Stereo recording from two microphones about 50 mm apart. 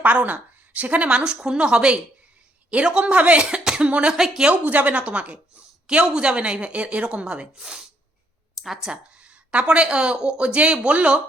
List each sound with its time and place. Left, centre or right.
0.0 s a woman's voice: right; by 3.8 s centre
3.8 s a woman's voice: right
4.2 s speech: centre
4.5 s a woman's voice: right; by 9.0 s centre
9.1 s speech: right